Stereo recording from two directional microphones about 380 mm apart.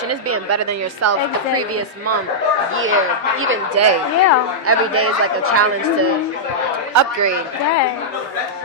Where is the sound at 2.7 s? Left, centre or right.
Right.